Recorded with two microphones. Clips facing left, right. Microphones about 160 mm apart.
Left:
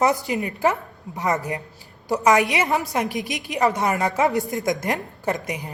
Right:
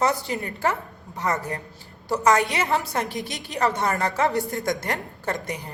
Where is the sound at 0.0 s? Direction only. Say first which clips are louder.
Left 3 dB; 20° left (ahead or behind).